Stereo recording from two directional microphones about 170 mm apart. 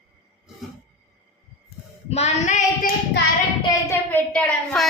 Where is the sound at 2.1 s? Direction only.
40° left (ahead or behind).